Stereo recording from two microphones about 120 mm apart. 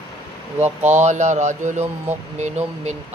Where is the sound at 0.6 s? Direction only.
70° right (ahead or behind).